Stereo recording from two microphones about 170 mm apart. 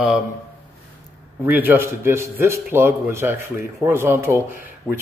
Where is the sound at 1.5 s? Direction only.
10° right (ahead or behind).